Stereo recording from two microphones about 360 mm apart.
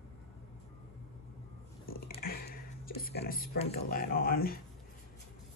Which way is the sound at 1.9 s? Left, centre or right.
Left.